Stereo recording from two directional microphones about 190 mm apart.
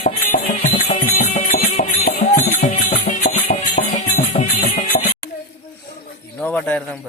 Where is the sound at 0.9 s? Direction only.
40° left (ahead or behind).